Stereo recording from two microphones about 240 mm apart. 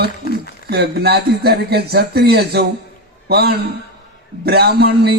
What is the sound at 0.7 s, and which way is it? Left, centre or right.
A man's voice, right.